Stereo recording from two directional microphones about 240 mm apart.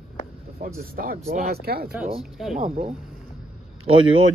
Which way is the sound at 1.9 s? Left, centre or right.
Centre.